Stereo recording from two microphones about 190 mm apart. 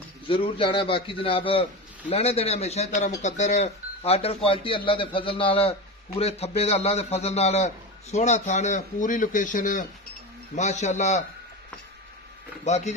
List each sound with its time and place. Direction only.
0.3 s a man's voice: 25° left (ahead or behind)
12.6 s a man's voice: 35° left (ahead or behind)